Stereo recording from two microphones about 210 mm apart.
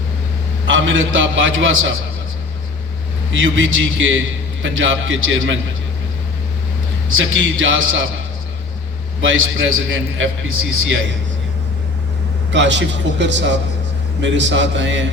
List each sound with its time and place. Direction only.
0.7 s a man's voice: 65° right (ahead or behind)
3.3 s a man's voice: 65° right (ahead or behind)
7.1 s a man's voice: 65° right (ahead or behind)
9.2 s a man's voice: 70° right (ahead or behind)
12.5 s a man's voice: 60° right (ahead or behind)